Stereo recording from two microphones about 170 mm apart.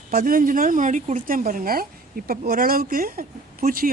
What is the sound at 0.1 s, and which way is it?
Speech, 55° right (ahead or behind).